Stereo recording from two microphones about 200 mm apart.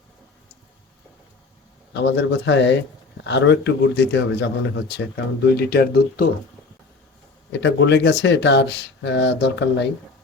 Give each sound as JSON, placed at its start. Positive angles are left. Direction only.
{"t": 1.9, "sound": "speech", "side_deg": 60}
{"t": 7.5, "sound": "speech", "side_deg": 65}